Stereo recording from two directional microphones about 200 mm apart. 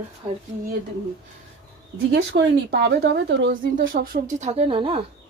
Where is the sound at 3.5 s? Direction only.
45° right (ahead or behind); by 5.0 s 25° right (ahead or behind).